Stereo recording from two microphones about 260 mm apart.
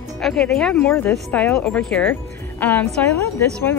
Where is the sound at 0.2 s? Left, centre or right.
Centre.